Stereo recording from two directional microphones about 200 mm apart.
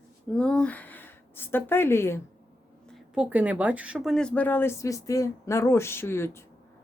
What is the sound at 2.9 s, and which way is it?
Speech, 5° right (ahead or behind).